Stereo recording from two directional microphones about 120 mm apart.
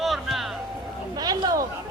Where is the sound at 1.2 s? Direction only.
35° right (ahead or behind).